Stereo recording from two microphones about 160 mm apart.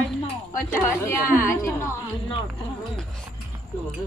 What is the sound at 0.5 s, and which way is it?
A woman's voice, 15° left (ahead or behind).